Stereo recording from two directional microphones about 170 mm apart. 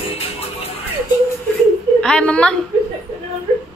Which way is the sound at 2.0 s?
5° left (ahead or behind).